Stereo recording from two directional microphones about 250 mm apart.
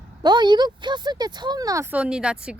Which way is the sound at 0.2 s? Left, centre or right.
Centre.